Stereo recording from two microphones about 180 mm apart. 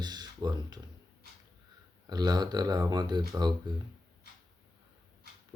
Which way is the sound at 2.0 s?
20° right (ahead or behind).